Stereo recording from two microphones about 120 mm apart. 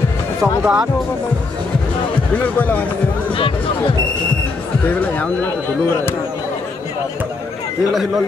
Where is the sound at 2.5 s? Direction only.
15° left (ahead or behind).